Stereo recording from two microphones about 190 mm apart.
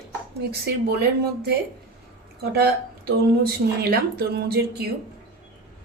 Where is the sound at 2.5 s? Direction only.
55° right (ahead or behind).